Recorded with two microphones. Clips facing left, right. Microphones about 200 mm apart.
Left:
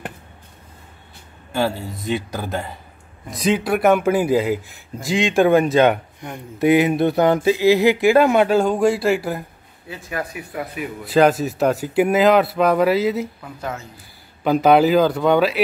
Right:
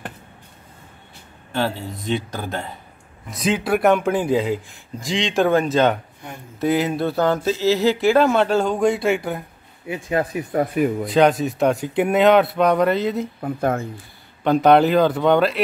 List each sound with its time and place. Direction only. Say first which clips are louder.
1.5 s speech: left 2 dB; 5° left (ahead or behind)
9.8 s speech: right 6 dB; 25° right (ahead or behind)
10.5 s speech: right 12 dB; 45° right (ahead or behind)
11.1 s speech: left 4 dB; 5° left (ahead or behind)
13.4 s speech: right 8 dB; 50° right (ahead or behind)
14.4 s speech: even; 5° left (ahead or behind)